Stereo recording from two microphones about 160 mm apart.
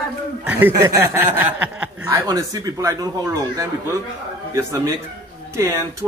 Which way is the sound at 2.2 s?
20° right (ahead or behind).